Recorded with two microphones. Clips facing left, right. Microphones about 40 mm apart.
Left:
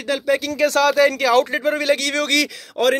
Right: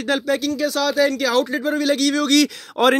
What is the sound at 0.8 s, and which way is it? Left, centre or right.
Speech, left.